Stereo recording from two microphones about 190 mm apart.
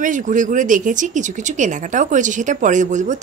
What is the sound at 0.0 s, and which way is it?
Speech, 40° right (ahead or behind).